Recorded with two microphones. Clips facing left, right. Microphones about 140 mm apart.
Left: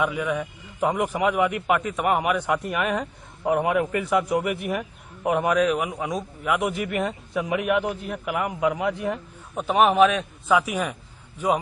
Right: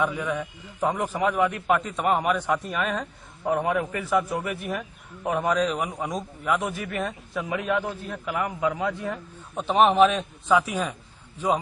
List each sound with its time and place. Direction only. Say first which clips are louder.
0.0 s a man's voice: left 2 dB; 10° left (ahead or behind)
9.6 s a man's voice: even; centre (ahead or behind)
10.5 s a man's voice: left 1 dB; 10° left (ahead or behind)